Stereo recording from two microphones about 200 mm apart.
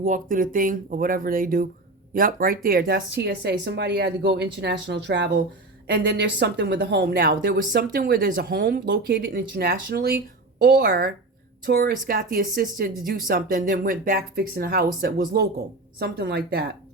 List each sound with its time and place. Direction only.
0.0 s speech: 40° right (ahead or behind)